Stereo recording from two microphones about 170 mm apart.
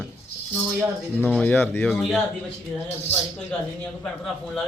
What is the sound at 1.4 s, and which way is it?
Speech, 10° left (ahead or behind).